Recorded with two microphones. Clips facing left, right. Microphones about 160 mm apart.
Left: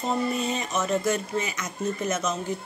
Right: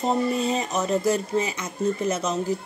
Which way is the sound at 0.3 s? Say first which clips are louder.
Right 3 dB; 30° right (ahead or behind).